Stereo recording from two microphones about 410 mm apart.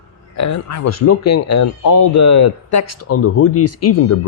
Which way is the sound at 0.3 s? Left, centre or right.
Left.